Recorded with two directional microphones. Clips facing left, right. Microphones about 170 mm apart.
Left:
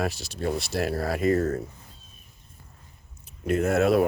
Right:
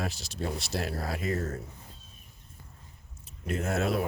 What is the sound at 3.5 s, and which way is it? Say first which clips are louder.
Speech: left 8 dB; 65° left (ahead or behind).